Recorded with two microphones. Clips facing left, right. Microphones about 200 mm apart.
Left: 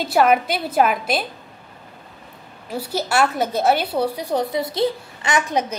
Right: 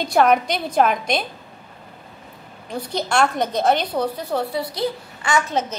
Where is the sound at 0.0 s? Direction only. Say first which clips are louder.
Even; 5° left (ahead or behind).